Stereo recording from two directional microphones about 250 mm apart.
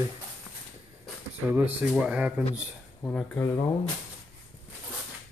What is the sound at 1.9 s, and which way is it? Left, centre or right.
Speech, centre.